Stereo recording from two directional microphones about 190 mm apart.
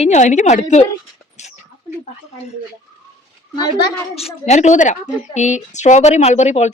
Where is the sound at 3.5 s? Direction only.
25° left (ahead or behind).